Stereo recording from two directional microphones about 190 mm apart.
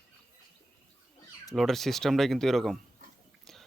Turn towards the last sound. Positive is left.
turn(degrees=-45)  # may be behind; listen again after turning